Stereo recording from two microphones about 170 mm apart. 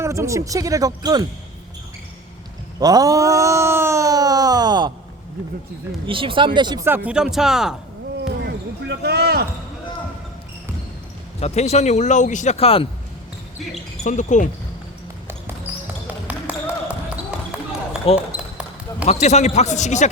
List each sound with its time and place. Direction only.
0.0 s speech: 15° right (ahead or behind)
2.8 s a sound: 20° right (ahead or behind)
6.1 s speech: 30° right (ahead or behind)
6.8 s speech: 10° right (ahead or behind)
8.2 s basketball bounce: 80° right; by 9.5 s 65° right (ahead or behind)
11.3 s speech: 40° left (ahead or behind)
14.0 s a man's voice: 45° left (ahead or behind)
16.2 s basketball bounce: 10° right (ahead or behind)
18.1 s a man's voice: 35° left (ahead or behind)